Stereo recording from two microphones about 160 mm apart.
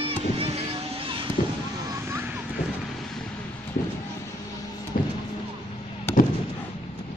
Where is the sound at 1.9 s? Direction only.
15° right (ahead or behind).